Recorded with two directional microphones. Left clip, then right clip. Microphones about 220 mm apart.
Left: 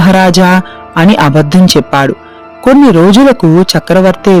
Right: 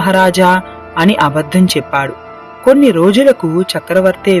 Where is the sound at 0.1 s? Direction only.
40° left (ahead or behind).